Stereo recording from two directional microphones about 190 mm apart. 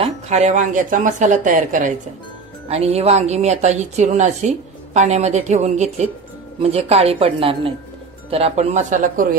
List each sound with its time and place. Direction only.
0.0 s speech: 35° right (ahead or behind)
2.7 s a woman's voice: 35° right (ahead or behind)